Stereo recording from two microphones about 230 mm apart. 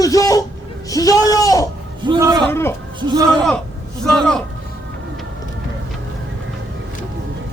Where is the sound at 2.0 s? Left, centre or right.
Centre.